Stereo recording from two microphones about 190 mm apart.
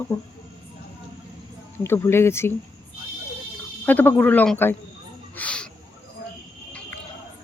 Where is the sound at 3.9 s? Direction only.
10° left (ahead or behind).